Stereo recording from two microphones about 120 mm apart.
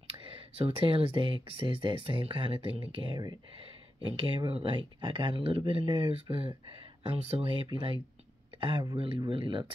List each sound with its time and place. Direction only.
0.1 s speech: 50° right (ahead or behind)